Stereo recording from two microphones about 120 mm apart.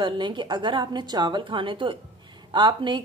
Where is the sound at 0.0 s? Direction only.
40° right (ahead or behind).